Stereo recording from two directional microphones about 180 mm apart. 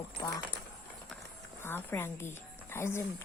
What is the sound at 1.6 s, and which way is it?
Speech, 10° left (ahead or behind).